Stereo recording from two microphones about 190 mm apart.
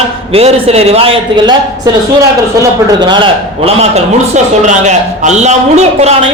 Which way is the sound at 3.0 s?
25° right (ahead or behind).